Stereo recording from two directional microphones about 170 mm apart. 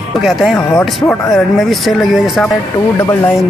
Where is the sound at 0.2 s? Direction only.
Centre (ahead or behind).